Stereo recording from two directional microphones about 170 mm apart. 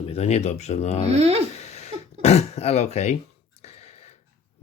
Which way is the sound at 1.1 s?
35° right (ahead or behind).